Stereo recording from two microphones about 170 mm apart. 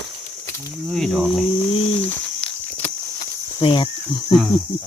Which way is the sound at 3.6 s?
30° left (ahead or behind).